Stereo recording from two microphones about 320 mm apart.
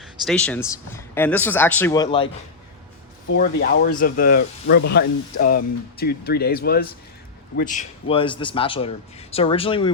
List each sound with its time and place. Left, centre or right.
0.0 s a man's voice: centre
3.3 s a man's voice: left